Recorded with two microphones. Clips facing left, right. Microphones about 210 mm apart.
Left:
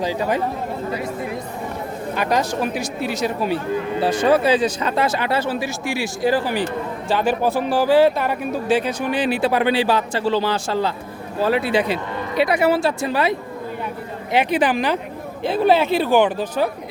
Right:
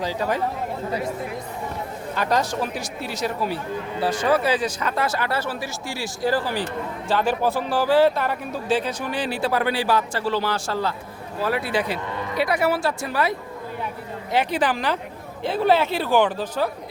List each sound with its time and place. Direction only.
0.0 s speech: 15° left (ahead or behind)
2.1 s speech: 15° left (ahead or behind)
14.3 s speech: 15° left (ahead or behind)